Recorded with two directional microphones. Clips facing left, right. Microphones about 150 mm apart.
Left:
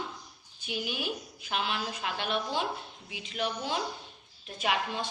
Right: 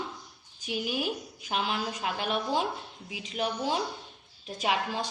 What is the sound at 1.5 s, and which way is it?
A woman's voice, 35° right (ahead or behind).